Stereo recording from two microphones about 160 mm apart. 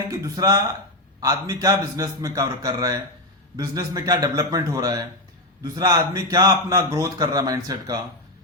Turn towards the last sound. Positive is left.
turn(degrees=-25)  # may be behind; listen again after turning